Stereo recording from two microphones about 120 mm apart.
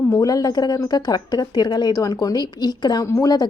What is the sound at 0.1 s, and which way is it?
Speech, 30° left (ahead or behind).